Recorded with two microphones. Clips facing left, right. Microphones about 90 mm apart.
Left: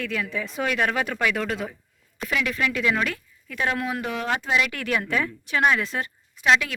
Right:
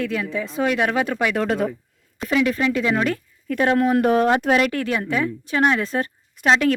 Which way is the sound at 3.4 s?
45° right (ahead or behind).